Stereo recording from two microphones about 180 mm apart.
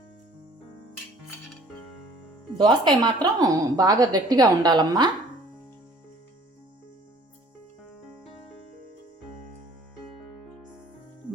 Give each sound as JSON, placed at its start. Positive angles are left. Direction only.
{"t": 2.6, "sound": "a woman's voice", "side_deg": -25}